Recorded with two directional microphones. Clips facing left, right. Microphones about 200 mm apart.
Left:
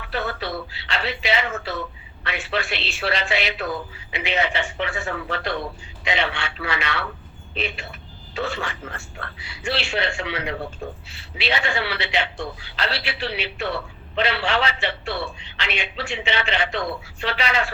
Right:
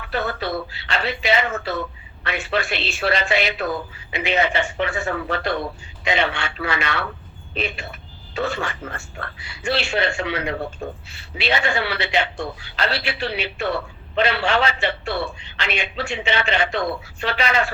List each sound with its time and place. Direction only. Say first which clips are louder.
0.1 s a man's voice: right 3 dB; 50° right (ahead or behind)